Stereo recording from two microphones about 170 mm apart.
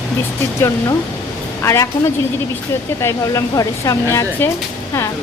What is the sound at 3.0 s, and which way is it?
Speech, 20° left (ahead or behind).